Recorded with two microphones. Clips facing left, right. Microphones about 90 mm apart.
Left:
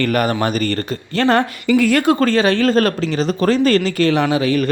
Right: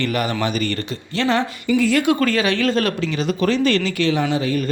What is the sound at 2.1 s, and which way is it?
A man's voice, 35° left (ahead or behind).